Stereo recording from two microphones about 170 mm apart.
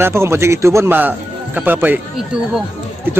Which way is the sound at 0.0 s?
15° right (ahead or behind).